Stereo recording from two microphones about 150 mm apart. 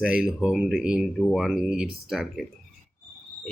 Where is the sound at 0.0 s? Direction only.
5° right (ahead or behind).